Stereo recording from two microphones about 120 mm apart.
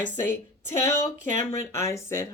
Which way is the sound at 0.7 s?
25° left (ahead or behind).